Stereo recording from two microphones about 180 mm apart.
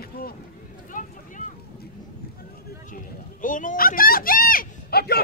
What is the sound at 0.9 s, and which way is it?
Vehicle, 45° left (ahead or behind).